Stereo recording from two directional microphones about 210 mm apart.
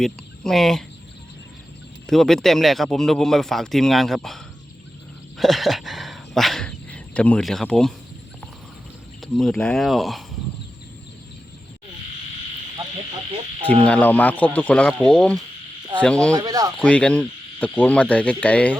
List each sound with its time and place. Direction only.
0.0 s speech: centre (ahead or behind)
2.0 s speech: centre (ahead or behind)
5.4 s speech: centre (ahead or behind)
9.2 s speech: centre (ahead or behind)
13.8 s speech: 5° left (ahead or behind)
16.3 s speech: 15° right (ahead or behind)
16.8 s speech: 5° left (ahead or behind)